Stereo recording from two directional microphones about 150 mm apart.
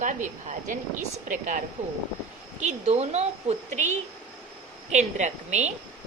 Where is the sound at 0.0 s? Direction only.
55° right (ahead or behind).